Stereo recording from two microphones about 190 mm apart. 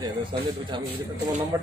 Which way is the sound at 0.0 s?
25° right (ahead or behind).